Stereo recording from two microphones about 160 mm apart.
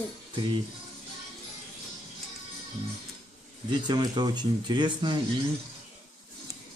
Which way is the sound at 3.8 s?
25° right (ahead or behind).